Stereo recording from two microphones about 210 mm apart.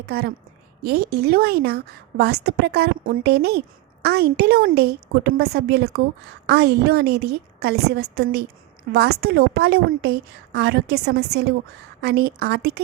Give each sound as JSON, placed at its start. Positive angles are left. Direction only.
{"t": 0.0, "sound": "a woman's voice", "side_deg": -50}